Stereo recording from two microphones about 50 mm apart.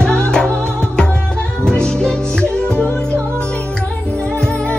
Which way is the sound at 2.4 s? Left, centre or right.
Left.